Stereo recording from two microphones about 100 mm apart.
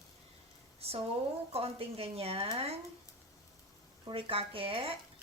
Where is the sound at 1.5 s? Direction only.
75° right (ahead or behind).